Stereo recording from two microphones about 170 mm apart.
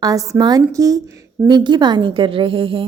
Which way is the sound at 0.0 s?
20° right (ahead or behind).